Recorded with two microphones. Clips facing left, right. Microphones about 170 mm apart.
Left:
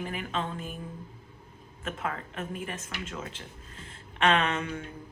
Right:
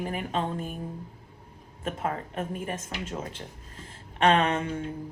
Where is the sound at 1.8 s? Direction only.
35° right (ahead or behind).